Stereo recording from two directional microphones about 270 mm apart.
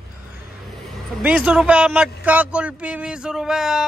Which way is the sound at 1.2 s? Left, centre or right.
Centre.